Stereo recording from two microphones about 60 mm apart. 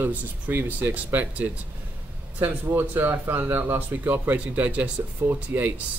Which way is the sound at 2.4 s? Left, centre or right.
Right.